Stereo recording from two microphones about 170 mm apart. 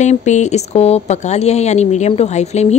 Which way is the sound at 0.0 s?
45° left (ahead or behind).